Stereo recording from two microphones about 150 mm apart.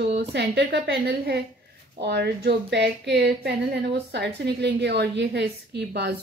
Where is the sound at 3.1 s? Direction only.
90° right.